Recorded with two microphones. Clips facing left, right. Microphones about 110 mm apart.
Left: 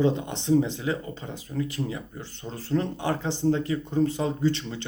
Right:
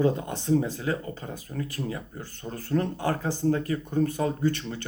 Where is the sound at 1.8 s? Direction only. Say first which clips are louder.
Even; 45° right (ahead or behind).